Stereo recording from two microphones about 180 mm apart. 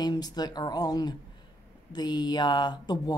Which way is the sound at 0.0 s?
25° left (ahead or behind).